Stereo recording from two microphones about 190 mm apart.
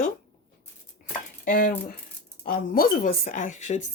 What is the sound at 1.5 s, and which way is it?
A woman's voice, 50° left (ahead or behind).